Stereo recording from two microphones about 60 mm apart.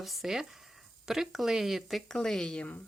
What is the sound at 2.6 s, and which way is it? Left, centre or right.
Speech, left.